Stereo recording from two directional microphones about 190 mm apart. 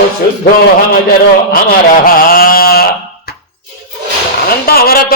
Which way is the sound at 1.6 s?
50° left (ahead or behind).